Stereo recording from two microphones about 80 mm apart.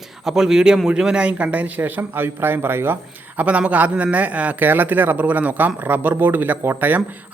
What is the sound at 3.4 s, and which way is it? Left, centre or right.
Speech, centre.